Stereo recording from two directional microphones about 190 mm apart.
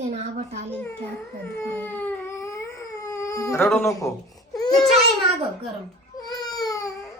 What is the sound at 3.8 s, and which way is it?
Speech, 15° left (ahead or behind).